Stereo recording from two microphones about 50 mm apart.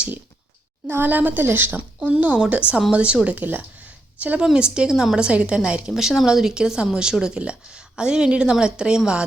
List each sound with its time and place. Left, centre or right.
0.9 s a woman's voice: right
2.0 s speech: right
3.4 s a woman's voice: right
4.2 s speech: right; by 5.2 s centre
5.2 s speech: right